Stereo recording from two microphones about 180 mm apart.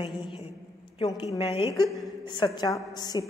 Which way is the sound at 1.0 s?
25° left (ahead or behind).